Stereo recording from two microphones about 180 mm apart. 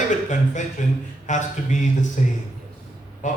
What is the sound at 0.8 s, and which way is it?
A man's voice, 40° left (ahead or behind).